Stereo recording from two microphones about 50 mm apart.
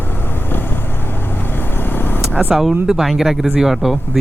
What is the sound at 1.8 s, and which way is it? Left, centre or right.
Vehicle, left.